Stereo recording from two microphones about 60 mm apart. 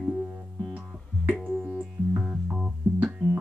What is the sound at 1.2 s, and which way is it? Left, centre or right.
Music, centre.